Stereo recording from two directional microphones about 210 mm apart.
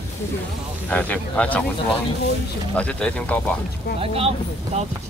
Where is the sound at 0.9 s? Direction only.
5° left (ahead or behind).